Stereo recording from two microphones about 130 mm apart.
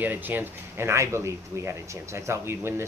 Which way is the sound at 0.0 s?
15° right (ahead or behind).